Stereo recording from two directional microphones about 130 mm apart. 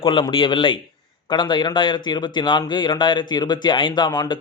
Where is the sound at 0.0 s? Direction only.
40° left (ahead or behind).